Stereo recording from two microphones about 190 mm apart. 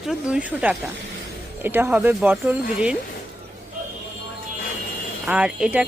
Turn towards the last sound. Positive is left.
turn(degrees=-5)  # may be behind; listen again after turning